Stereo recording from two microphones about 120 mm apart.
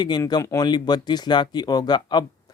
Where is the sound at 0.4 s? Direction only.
35° left (ahead or behind).